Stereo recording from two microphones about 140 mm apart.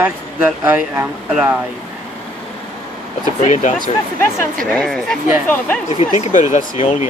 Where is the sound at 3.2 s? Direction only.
55° left (ahead or behind).